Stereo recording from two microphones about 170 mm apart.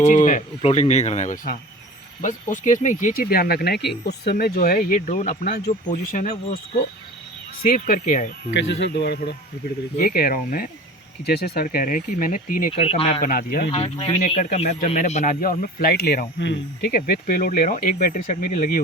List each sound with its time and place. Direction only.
0.0 s speech: 45° left (ahead or behind); by 4.8 s 65° left (ahead or behind)
5.0 s speech: 45° left (ahead or behind)
7.6 s speech: 55° left (ahead or behind)
8.4 s speech: 90° left
10.0 s speech: 60° left (ahead or behind)
12.7 s speech: 35° left (ahead or behind)
13.2 s speech: 60° left (ahead or behind)
13.7 s speech: 35° left (ahead or behind); by 18.8 s 50° left (ahead or behind)